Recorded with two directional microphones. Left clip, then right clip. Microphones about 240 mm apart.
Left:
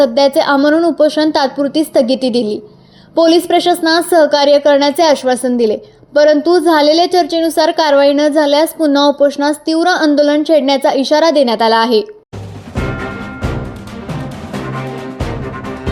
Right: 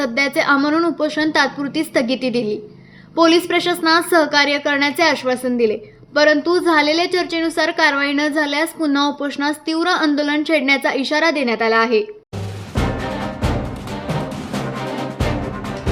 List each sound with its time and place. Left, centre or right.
0.0 s a woman's voice: centre